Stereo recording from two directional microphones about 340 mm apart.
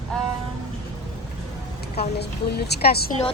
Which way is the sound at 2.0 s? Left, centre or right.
Left.